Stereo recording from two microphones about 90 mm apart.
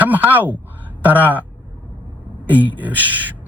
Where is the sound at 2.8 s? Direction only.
20° right (ahead or behind).